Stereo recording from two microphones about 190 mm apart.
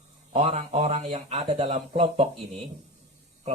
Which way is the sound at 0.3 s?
35° right (ahead or behind).